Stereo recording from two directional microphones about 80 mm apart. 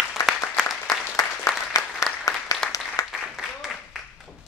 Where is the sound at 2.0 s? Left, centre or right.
Left.